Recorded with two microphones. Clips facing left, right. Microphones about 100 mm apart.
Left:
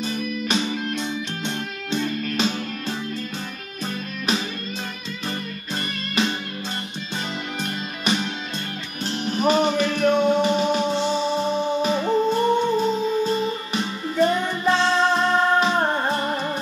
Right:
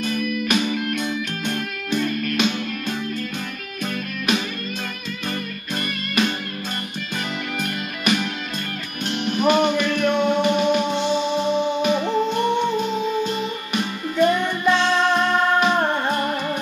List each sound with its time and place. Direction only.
0.0 s music: 30° left (ahead or behind)
6.2 s music: 30° left (ahead or behind)
7.5 s music: 30° left (ahead or behind)